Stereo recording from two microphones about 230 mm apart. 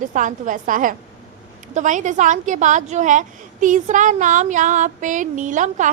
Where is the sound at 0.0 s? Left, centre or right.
Right.